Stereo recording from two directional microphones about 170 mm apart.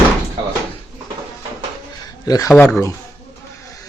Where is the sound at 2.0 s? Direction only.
20° left (ahead or behind).